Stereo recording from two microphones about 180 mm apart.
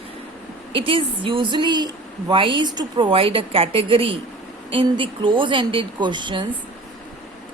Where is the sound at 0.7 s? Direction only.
30° right (ahead or behind).